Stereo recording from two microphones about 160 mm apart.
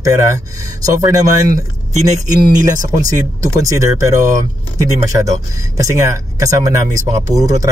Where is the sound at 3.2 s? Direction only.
20° right (ahead or behind).